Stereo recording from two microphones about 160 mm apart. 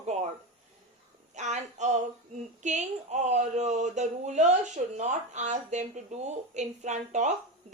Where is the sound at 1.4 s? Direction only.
45° right (ahead or behind).